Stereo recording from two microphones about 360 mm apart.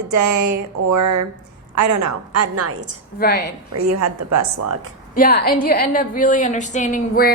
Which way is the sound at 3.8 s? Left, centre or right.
Right.